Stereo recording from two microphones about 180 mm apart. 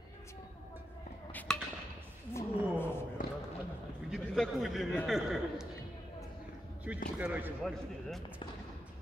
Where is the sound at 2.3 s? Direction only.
15° left (ahead or behind).